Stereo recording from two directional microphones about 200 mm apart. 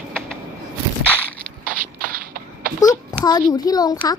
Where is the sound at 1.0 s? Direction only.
10° left (ahead or behind).